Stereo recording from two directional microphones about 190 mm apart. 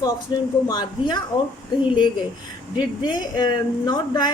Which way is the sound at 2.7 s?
25° left (ahead or behind).